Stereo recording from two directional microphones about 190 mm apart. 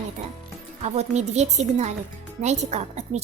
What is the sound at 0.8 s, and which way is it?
A woman's voice, 35° right (ahead or behind).